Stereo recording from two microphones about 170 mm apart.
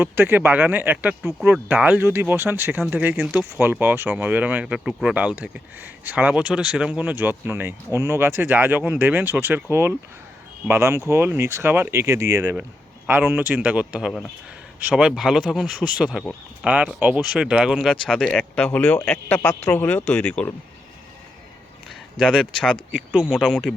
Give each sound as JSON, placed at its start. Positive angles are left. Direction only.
{"t": 0.0, "sound": "speech", "side_deg": -15}
{"t": 22.2, "sound": "speech", "side_deg": -5}